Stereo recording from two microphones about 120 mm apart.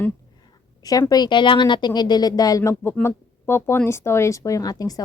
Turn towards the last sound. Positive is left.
turn(degrees=30)  # may be behind; listen again after turning